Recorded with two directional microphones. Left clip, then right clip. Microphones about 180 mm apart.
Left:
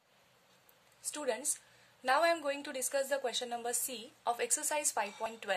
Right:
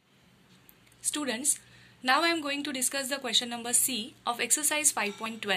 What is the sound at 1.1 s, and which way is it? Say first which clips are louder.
A woman's voice: right 4 dB; 45° left (ahead or behind).